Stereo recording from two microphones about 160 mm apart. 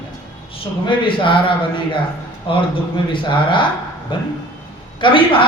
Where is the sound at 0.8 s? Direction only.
30° left (ahead or behind).